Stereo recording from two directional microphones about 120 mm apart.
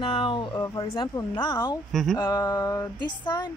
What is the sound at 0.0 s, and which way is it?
Speech, 45° left (ahead or behind).